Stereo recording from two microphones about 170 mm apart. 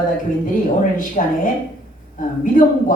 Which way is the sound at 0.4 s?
50° left (ahead or behind).